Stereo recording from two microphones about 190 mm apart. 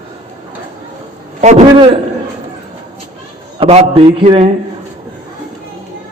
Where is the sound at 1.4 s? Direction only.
40° right (ahead or behind).